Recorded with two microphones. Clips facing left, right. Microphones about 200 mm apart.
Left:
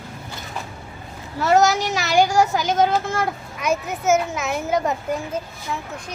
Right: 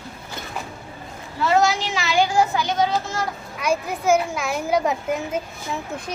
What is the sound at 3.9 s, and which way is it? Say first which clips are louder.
A child's voice: even; 5° left (ahead or behind).